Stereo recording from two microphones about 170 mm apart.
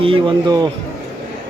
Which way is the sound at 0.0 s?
30° right (ahead or behind).